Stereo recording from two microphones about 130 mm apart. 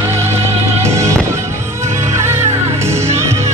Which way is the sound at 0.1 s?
20° right (ahead or behind).